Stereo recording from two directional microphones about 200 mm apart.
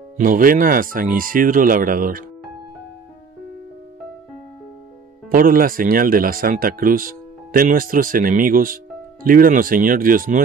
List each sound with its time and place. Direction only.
0.2 s speech: 45° right (ahead or behind)
5.3 s speech: 45° right (ahead or behind)